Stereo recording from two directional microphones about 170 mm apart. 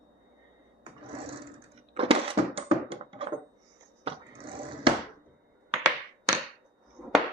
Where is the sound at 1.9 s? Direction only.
35° right (ahead or behind).